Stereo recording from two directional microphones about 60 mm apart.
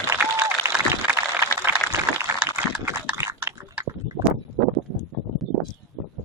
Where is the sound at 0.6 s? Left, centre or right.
Right.